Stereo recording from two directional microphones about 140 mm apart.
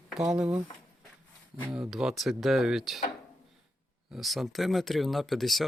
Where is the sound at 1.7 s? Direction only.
5° right (ahead or behind).